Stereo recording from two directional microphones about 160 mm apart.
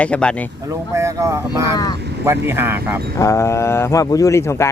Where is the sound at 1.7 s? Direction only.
25° left (ahead or behind).